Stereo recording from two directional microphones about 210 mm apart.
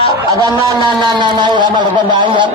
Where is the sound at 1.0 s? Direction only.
20° right (ahead or behind).